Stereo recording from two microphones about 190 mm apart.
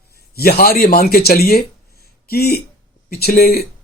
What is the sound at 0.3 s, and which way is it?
Speech, 55° left (ahead or behind).